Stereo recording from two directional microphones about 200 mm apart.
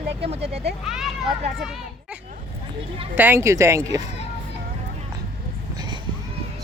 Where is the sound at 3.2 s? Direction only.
10° right (ahead or behind).